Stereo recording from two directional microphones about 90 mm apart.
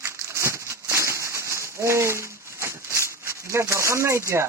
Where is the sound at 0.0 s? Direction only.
30° right (ahead or behind).